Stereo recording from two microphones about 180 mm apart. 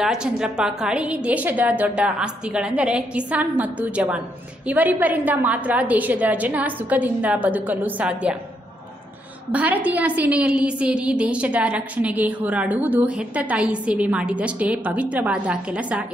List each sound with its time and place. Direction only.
0.0 s a woman's voice: 5° right (ahead or behind)
9.5 s a woman's voice: 10° right (ahead or behind)